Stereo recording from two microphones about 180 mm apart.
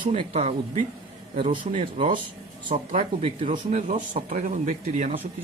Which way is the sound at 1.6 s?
45° right (ahead or behind).